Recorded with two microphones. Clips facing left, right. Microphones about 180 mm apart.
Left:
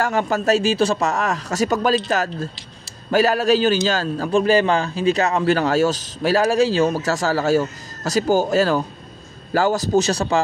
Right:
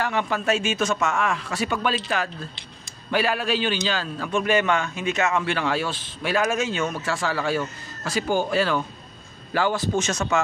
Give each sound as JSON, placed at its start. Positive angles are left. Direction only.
{"t": 0.0, "sound": "a man's voice", "side_deg": 40}